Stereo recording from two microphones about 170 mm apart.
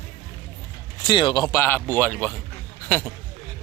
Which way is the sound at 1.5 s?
15° left (ahead or behind).